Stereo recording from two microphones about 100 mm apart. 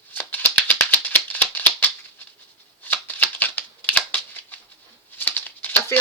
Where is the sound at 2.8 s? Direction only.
20° left (ahead or behind).